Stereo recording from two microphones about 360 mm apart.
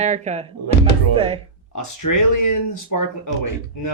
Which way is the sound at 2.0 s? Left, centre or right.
Left.